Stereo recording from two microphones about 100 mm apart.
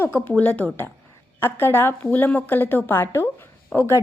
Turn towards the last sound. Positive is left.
turn(degrees=30)  # may be behind; listen again after turning